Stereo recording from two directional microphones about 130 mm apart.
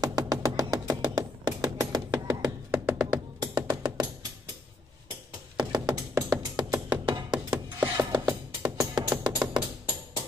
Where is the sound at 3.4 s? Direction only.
30° right (ahead or behind).